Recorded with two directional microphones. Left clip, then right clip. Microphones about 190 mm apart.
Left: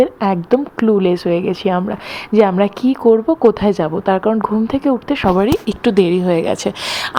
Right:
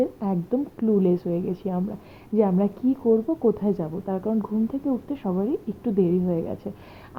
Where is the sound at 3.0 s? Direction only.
45° left (ahead or behind).